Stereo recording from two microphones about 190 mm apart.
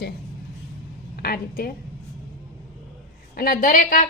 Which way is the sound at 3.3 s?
50° left (ahead or behind).